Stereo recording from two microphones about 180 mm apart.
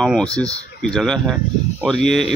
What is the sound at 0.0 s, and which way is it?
Speech, 5° left (ahead or behind).